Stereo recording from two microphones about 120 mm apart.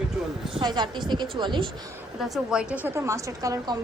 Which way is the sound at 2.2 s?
5° right (ahead or behind).